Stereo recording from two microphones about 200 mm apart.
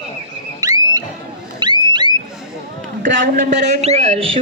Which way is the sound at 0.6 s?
20° right (ahead or behind).